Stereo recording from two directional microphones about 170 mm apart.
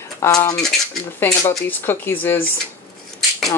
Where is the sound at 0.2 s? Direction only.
15° left (ahead or behind).